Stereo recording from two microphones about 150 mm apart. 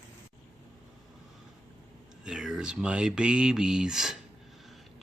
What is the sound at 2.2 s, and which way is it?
Speech, 5° right (ahead or behind).